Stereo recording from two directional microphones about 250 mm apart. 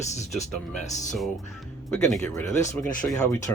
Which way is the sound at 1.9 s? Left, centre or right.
Centre.